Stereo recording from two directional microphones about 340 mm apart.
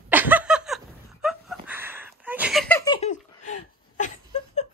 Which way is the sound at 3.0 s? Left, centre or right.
Left.